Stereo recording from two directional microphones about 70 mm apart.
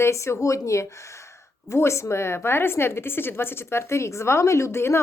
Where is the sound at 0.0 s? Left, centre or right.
Left.